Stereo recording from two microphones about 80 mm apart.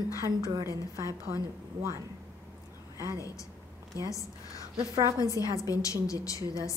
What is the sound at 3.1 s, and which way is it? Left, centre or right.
Speech, left.